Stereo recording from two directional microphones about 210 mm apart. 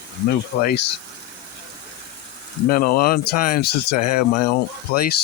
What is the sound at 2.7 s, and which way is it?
Speech, 45° left (ahead or behind).